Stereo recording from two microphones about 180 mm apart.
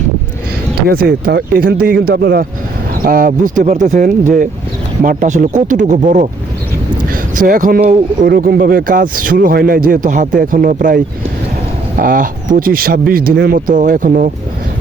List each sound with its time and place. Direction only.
0.8 s speech: 60° right (ahead or behind)